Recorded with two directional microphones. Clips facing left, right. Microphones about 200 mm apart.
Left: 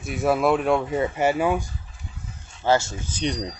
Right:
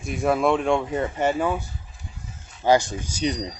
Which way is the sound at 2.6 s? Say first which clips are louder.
Right 2 dB; 15° right (ahead or behind).